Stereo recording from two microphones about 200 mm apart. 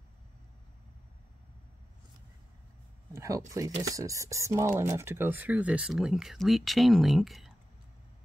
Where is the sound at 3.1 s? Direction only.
15° right (ahead or behind); by 7.5 s centre (ahead or behind).